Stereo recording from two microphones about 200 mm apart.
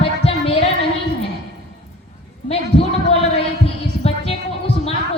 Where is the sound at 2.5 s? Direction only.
30° left (ahead or behind).